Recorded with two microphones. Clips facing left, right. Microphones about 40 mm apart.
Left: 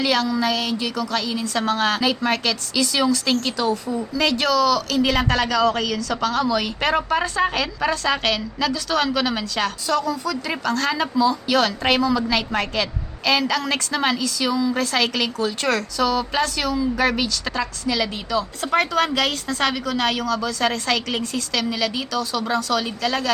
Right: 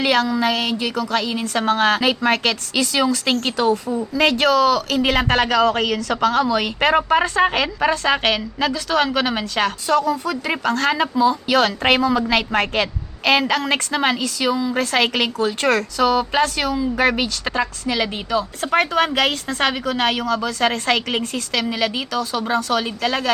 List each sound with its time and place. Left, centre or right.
0.0 s a woman's voice: right